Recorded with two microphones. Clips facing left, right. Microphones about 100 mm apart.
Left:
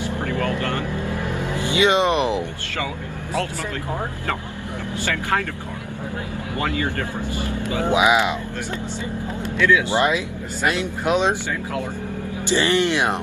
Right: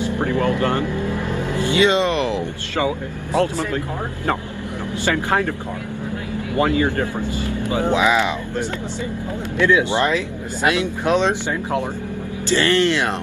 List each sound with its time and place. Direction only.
0.0 s vehicle: 20° right (ahead or behind)
1.2 s music: 15° left (ahead or behind)
6.5 s speech: 25° right (ahead or behind)
7.8 s speech: 15° left (ahead or behind)
9.6 s speech: 20° right (ahead or behind)
9.9 s speech: 15° left (ahead or behind)
12.4 s speech: 15° left (ahead or behind)